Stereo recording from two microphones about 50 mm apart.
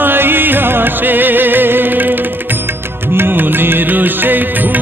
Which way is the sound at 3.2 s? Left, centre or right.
Right.